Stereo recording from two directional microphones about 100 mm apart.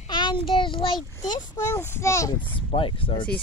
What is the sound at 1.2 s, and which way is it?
Speech, 45° left (ahead or behind).